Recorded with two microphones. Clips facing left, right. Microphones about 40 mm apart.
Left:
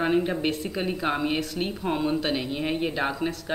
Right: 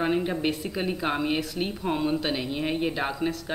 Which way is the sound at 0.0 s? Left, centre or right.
Centre.